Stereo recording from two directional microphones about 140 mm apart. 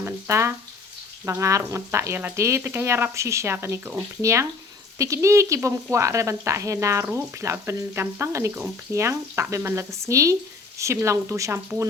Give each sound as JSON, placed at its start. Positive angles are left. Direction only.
{"t": 0.0, "sound": "speech", "side_deg": -20}